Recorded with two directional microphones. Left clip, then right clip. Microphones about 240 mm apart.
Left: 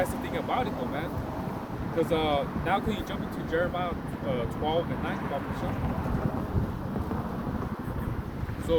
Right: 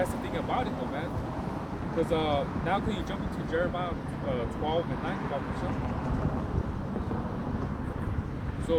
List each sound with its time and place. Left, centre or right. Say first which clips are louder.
0.0 s vehicle: left 1 dB; centre
2.0 s speech: left 2 dB; centre